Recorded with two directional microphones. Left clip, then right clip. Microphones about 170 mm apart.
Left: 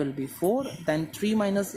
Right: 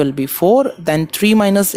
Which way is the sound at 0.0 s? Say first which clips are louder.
Right 13 dB; 55° right (ahead or behind).